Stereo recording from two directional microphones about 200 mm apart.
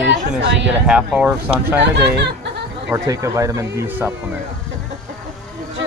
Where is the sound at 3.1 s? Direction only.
15° right (ahead or behind).